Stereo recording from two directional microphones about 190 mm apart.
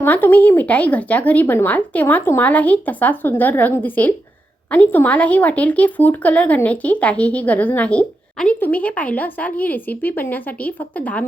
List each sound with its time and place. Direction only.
0.0 s speech: 10° left (ahead or behind)